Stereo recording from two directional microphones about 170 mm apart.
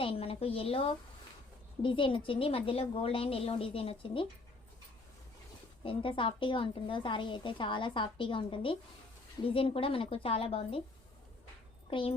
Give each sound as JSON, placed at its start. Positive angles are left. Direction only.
{"t": 0.0, "sound": "a woman's voice", "side_deg": 35}
{"t": 5.8, "sound": "a woman's voice", "side_deg": 30}
{"t": 11.9, "sound": "speech", "side_deg": 30}